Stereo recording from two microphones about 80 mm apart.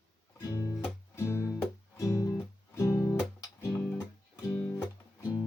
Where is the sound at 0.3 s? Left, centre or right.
Left.